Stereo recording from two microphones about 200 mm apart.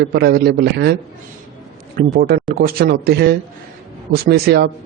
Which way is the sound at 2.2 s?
50° right (ahead or behind).